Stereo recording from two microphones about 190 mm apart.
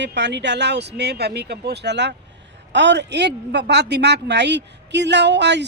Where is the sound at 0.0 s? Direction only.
65° right (ahead or behind).